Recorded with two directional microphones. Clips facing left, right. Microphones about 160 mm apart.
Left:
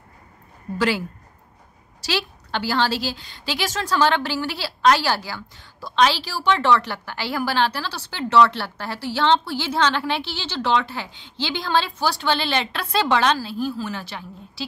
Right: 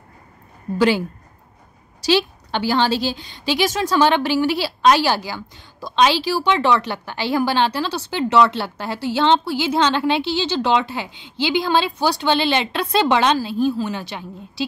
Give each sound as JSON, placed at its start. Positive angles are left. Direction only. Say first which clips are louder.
{"t": 0.7, "sound": "a woman's voice", "louder": "right 5 dB", "side_deg": -20}